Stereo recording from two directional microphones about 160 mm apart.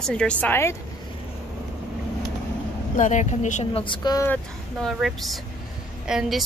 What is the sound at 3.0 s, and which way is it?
Speech, 50° left (ahead or behind).